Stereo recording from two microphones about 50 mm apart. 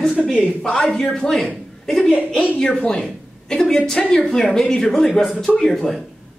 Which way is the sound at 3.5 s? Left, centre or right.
Centre.